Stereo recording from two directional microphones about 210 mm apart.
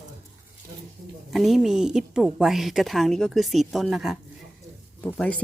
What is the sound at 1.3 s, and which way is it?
A woman's voice, centre (ahead or behind).